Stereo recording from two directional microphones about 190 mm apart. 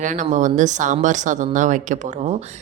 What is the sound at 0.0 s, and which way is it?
Speech, 40° right (ahead or behind).